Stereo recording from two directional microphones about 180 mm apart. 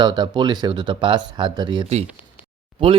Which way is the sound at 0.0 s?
25° right (ahead or behind).